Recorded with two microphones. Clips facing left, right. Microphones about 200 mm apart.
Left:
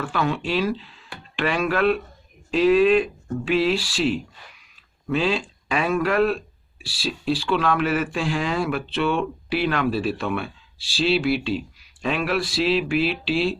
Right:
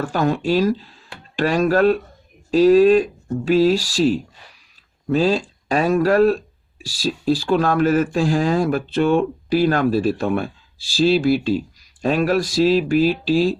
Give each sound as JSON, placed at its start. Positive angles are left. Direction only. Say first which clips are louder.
{"t": 0.0, "sound": "speech", "louder": "right 5 dB", "side_deg": -40}